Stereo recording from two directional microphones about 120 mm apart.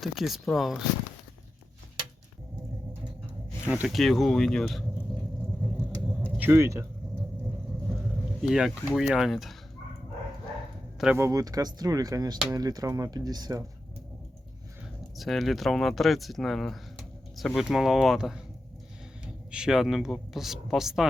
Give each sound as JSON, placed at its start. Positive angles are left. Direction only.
{"t": 0.0, "sound": "speech", "side_deg": 0}
{"t": 3.8, "sound": "speech", "side_deg": 0}
{"t": 5.7, "sound": "rumble", "side_deg": -10}
{"t": 8.4, "sound": "speech", "side_deg": -5}
{"t": 10.9, "sound": "speech", "side_deg": -5}
{"t": 11.2, "sound": "speech", "side_deg": -30}
{"t": 15.1, "sound": "speech", "side_deg": 0}
{"t": 19.5, "sound": "speech", "side_deg": -5}